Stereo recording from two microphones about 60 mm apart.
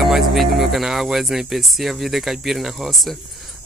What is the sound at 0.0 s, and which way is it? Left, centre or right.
Speech, centre.